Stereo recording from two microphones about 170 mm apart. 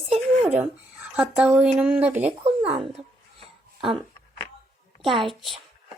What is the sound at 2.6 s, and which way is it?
Speech, 35° right (ahead or behind).